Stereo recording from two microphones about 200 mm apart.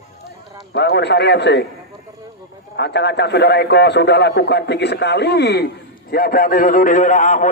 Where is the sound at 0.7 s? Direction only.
55° left (ahead or behind).